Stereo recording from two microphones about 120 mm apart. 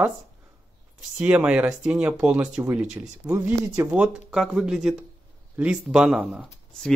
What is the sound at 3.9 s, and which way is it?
Speech, 10° right (ahead or behind).